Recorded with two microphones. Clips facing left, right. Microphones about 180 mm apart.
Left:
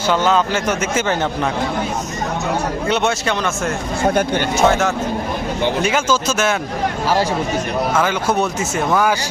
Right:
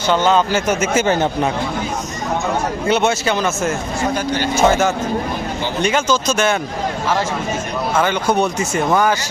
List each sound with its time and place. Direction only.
0.1 s speech: centre (ahead or behind)
0.9 s speech: 25° right (ahead or behind)
2.8 s speech: centre (ahead or behind)
4.1 s speech: 55° left (ahead or behind)
4.5 s speech: centre (ahead or behind)
8.0 s speech: 5° left (ahead or behind)